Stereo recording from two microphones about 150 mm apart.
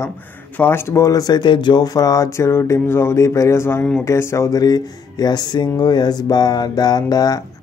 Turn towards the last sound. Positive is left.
turn(degrees=25)  # may be behind; listen again after turning